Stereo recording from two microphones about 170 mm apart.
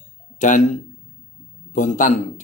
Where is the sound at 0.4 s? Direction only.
45° left (ahead or behind).